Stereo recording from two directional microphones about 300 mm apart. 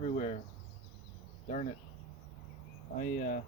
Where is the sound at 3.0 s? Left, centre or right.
Left.